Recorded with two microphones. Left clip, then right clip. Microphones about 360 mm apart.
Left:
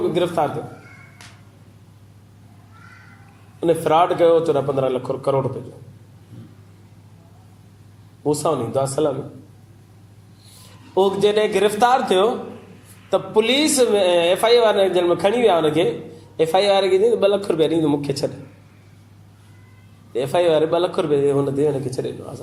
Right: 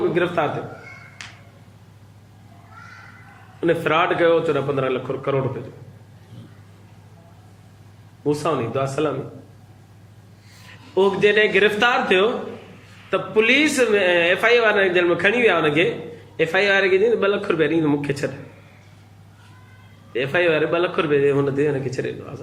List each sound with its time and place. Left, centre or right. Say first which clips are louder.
0.1 s a man's voice: left 1 dB; centre
3.6 s speech: left 2 dB; centre
8.2 s speech: left 1 dB; centre
10.9 s speech: even; centre
20.1 s speech: left 2 dB; centre